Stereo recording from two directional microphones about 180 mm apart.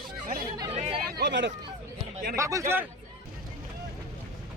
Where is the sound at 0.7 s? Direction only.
30° right (ahead or behind).